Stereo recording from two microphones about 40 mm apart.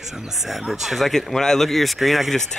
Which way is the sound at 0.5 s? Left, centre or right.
Centre.